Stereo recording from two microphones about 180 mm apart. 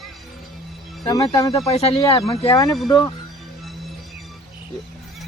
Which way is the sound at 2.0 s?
20° left (ahead or behind).